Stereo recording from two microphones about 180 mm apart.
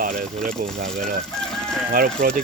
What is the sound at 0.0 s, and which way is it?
Speech, 50° right (ahead or behind).